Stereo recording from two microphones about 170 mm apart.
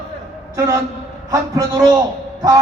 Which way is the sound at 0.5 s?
20° right (ahead or behind).